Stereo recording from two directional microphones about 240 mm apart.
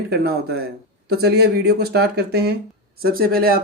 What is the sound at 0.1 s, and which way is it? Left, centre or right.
Speech, right.